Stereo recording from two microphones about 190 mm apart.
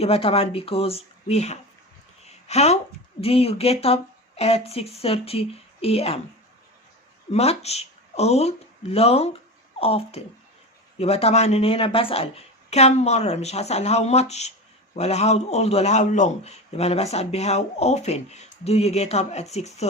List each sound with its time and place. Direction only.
0.0 s a man's voice: 30° left (ahead or behind)
2.2 s a sound: 35° left (ahead or behind)
3.2 s a man's voice: 30° left (ahead or behind)
7.3 s a man's voice: 35° left (ahead or behind)